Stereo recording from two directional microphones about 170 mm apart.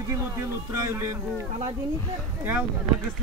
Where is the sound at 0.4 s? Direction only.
15° right (ahead or behind).